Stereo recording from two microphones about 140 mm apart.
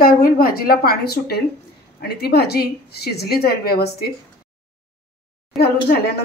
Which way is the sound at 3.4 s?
90° left.